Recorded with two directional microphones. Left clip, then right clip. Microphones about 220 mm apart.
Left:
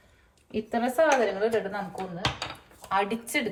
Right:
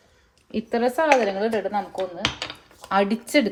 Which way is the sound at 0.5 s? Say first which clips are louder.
Right 3 dB; 40° right (ahead or behind).